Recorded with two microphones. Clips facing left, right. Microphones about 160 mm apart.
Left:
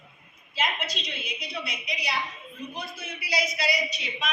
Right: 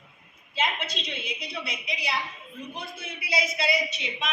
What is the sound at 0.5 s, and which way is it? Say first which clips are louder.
A woman's voice: right 1 dB; 25° right (ahead or behind).